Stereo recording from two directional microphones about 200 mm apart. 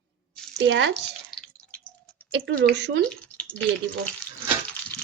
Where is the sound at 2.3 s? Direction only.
60° right (ahead or behind).